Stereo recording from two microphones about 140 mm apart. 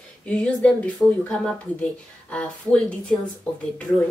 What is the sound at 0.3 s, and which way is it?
Speech, 10° left (ahead or behind).